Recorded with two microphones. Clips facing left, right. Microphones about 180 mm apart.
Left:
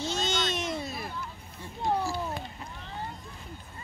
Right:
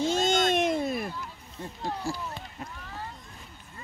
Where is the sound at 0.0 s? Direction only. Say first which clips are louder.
Right 6 dB; 50° right (ahead or behind).